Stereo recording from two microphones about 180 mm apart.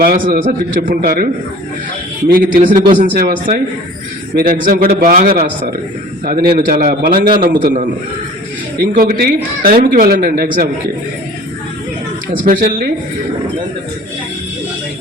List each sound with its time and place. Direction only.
0.0 s a man's voice: 50° right (ahead or behind)
2.3 s a man's voice: 50° right (ahead or behind)
4.6 s a man's voice: 50° right (ahead or behind)
12.5 s a man's voice: 55° right (ahead or behind)